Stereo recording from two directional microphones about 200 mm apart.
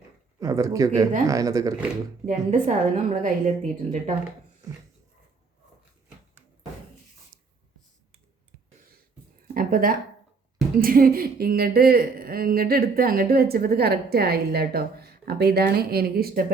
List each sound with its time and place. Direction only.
0.3 s speech: 15° right (ahead or behind)
2.2 s a woman's voice: 40° right (ahead or behind)
7.3 s writing: centre (ahead or behind)
9.6 s a sound: 45° right (ahead or behind)
10.8 s a woman's voice: 45° right (ahead or behind)